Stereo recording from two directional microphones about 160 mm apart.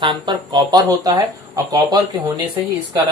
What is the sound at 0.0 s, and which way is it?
Speech, 30° right (ahead or behind).